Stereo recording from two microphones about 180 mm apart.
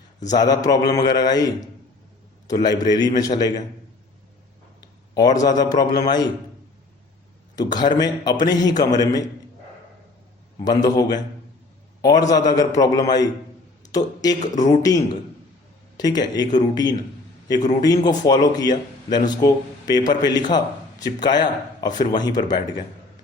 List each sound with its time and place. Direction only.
0.3 s a man's voice: 20° left (ahead or behind)
5.1 s a man's voice: 20° left (ahead or behind)
7.5 s a man's voice: 20° left (ahead or behind)
10.6 s a man's voice: 20° left (ahead or behind)
12.2 s a man's voice: 20° left (ahead or behind)